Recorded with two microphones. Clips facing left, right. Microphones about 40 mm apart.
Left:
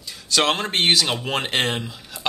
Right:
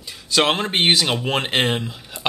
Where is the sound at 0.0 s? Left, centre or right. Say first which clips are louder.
Right 2 dB; centre.